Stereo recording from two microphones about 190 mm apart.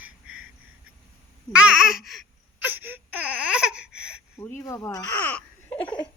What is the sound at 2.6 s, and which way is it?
Baby cry, 10° right (ahead or behind).